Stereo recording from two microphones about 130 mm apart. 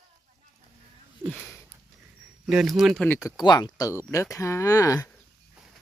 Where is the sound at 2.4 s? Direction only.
5° right (ahead or behind).